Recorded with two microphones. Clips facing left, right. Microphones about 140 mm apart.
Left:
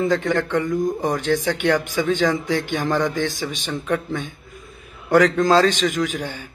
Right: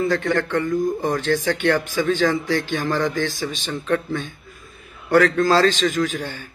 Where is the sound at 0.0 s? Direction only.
20° left (ahead or behind).